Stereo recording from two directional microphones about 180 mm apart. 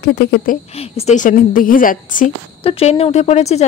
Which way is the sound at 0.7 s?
35° left (ahead or behind).